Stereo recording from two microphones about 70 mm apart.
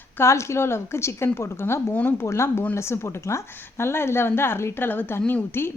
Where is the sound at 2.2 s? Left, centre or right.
Left.